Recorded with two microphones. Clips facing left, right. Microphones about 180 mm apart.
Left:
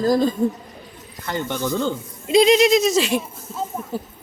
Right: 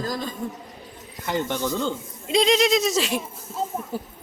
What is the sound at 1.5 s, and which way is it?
Speech, centre (ahead or behind).